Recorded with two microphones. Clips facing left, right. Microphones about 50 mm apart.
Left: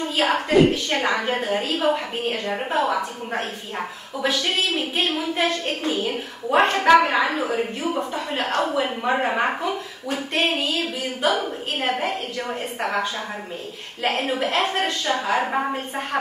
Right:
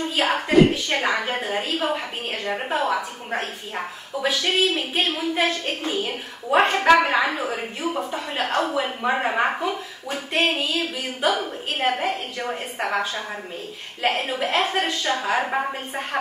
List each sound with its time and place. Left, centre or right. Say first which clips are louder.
0.1 s a woman's voice: even; centre